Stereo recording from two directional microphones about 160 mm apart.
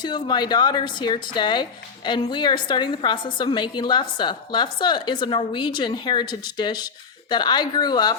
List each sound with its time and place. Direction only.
0.0 s a woman's voice: 25° left (ahead or behind)